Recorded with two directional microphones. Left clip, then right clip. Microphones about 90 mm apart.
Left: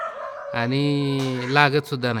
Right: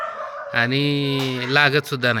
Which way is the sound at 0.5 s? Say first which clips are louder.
Right 4 dB; 25° left (ahead or behind).